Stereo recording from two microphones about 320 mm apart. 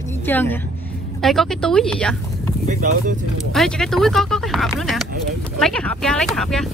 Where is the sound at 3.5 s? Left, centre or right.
Centre.